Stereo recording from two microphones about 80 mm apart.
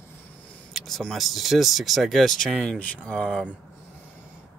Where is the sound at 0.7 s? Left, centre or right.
Centre.